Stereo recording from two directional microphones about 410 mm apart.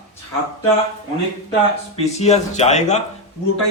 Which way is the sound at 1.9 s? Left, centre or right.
Centre.